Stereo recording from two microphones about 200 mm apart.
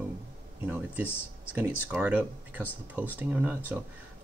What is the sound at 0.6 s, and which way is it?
Speech, 10° right (ahead or behind).